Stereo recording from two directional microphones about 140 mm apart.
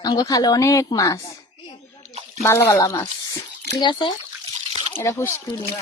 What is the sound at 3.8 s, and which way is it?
Speech, 35° left (ahead or behind).